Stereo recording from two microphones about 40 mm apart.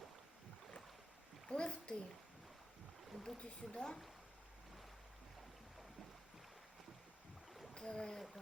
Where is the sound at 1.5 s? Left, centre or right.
Left.